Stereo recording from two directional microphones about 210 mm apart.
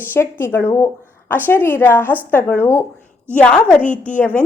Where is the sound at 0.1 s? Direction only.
10° left (ahead or behind).